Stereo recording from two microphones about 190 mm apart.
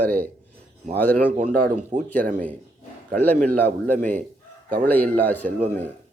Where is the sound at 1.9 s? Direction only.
45° right (ahead or behind).